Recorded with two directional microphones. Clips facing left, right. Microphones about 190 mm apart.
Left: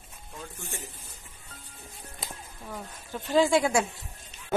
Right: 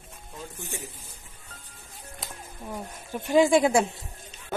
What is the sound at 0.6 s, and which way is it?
Speech, 15° right (ahead or behind).